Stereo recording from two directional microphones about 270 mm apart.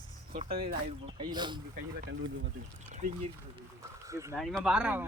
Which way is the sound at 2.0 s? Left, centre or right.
Right.